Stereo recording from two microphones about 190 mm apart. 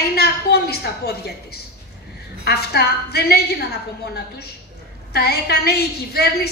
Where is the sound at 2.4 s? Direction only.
55° left (ahead or behind).